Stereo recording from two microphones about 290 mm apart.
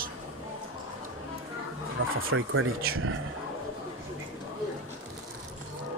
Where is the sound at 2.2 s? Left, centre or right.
Right.